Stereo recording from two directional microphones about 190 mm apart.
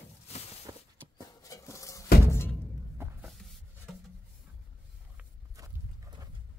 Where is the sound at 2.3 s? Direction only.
10° left (ahead or behind).